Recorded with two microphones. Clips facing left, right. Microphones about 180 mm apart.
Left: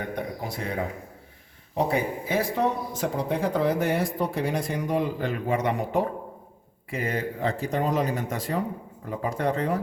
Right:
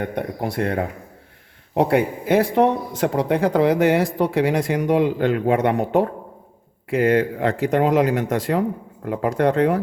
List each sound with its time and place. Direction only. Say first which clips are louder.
0.0 s speech: right 6 dB; 65° right (ahead or behind)
6.9 s speech: right 11 dB; 75° right (ahead or behind)
7.6 s speech: right 9 dB; 90° right; by 9.8 s 70° right (ahead or behind)